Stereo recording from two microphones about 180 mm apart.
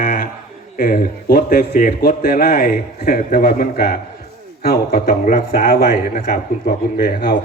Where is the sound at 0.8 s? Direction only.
55° left (ahead or behind).